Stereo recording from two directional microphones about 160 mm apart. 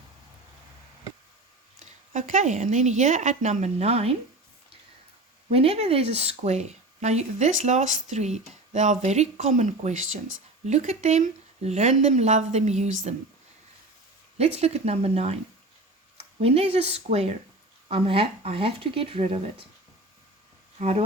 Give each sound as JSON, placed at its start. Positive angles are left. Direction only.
{"t": 1.8, "sound": "speech", "side_deg": -50}
{"t": 5.5, "sound": "speech", "side_deg": -40}
{"t": 14.3, "sound": "speech", "side_deg": -40}
{"t": 20.7, "sound": "speech", "side_deg": -40}